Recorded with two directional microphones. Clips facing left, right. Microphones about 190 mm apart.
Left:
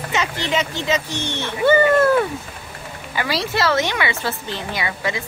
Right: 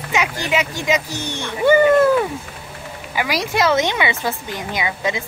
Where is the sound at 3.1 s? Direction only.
15° right (ahead or behind).